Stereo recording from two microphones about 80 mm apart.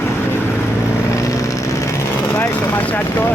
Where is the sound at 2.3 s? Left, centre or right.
Left.